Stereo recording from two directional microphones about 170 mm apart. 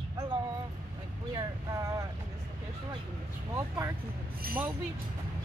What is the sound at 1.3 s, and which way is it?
Vehicle, 20° right (ahead or behind).